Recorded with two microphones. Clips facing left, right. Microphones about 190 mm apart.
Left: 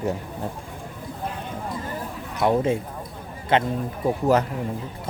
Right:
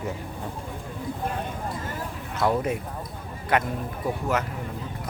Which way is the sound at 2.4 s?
25° left (ahead or behind).